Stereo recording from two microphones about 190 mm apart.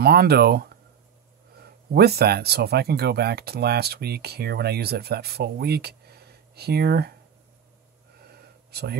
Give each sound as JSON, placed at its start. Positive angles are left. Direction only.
{"t": 0.0, "sound": "speech", "side_deg": -55}
{"t": 1.9, "sound": "speech", "side_deg": -55}
{"t": 8.3, "sound": "a sound", "side_deg": -55}